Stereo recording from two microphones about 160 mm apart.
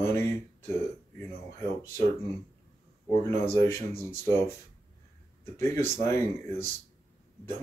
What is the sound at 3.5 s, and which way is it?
Speech, 15° left (ahead or behind).